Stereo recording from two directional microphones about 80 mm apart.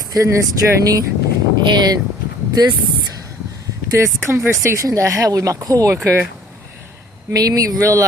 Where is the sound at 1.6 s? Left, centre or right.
Right.